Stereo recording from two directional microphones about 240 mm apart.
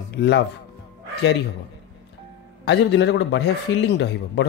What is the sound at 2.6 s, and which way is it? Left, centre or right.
Speech, left.